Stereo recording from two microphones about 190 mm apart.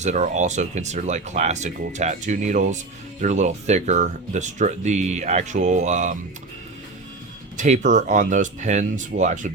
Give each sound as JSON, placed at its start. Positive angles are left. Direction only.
{"t": 0.0, "sound": "speech", "side_deg": -40}
{"t": 7.5, "sound": "speech", "side_deg": -40}